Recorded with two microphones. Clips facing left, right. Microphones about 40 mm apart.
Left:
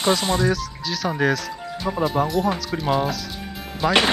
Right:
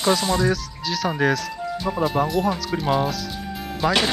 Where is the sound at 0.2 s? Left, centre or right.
Centre.